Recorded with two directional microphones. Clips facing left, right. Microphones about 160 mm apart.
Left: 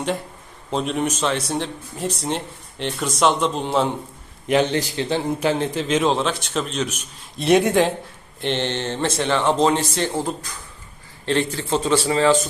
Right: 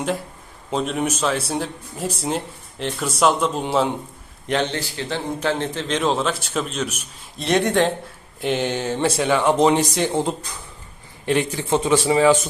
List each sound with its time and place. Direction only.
0.7 s a man's voice: centre (ahead or behind)
4.4 s a man's voice: 10° left (ahead or behind)
7.4 s a man's voice: 5° left (ahead or behind)
8.4 s speech: 10° right (ahead or behind)